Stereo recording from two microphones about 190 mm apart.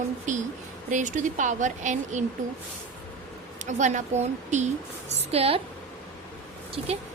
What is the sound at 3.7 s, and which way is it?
Speech, 40° right (ahead or behind).